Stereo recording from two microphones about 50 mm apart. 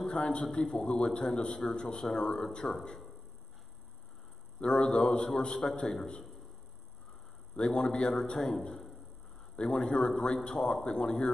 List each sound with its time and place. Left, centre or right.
0.0 s a man's voice: left
4.6 s a man's voice: centre
7.5 s a man's voice: centre